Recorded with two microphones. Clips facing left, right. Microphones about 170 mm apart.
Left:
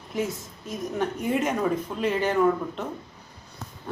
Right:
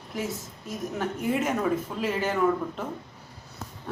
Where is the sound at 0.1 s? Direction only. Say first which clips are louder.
Left 3 dB; centre (ahead or behind).